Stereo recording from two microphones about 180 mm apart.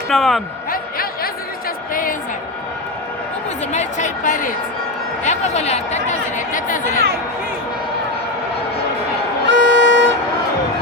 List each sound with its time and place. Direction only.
0.1 s a man's voice: centre (ahead or behind)
0.7 s a sound: 55° left (ahead or behind)
1.9 s music: 50° left (ahead or behind)
3.7 s speech: 40° left (ahead or behind)
9.5 s violin: 80° right